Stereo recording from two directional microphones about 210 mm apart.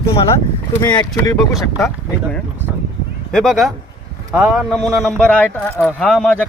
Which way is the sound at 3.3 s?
Centre (ahead or behind).